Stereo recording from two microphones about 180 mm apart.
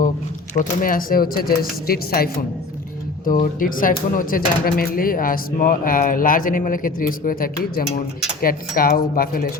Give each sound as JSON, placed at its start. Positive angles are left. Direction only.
{"t": 0.5, "sound": "speech", "side_deg": 50}
{"t": 3.4, "sound": "speech", "side_deg": 50}